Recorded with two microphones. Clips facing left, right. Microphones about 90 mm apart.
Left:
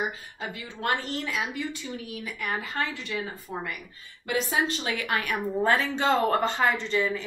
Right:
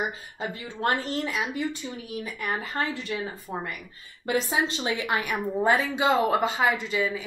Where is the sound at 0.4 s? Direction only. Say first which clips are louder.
Right 4 dB; 35° right (ahead or behind).